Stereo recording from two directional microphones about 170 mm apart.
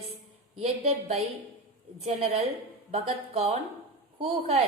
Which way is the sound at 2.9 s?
35° right (ahead or behind).